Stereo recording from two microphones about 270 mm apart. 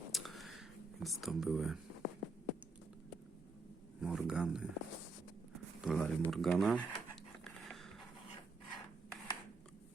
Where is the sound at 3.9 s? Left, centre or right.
Centre.